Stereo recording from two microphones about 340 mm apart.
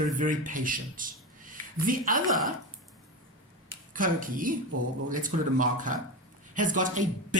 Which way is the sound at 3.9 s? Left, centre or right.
Right.